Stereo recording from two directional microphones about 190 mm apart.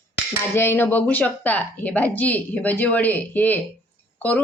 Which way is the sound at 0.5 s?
10° left (ahead or behind).